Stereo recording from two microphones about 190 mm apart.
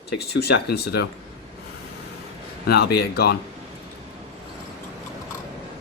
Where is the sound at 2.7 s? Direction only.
55° left (ahead or behind).